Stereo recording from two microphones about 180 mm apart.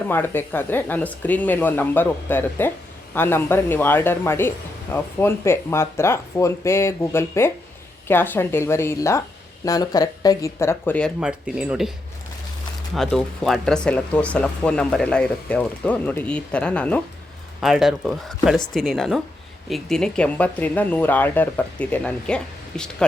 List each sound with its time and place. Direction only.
0.1 s speech: 10° left (ahead or behind)
11.2 s speech: 5° right (ahead or behind)
12.9 s speech: centre (ahead or behind)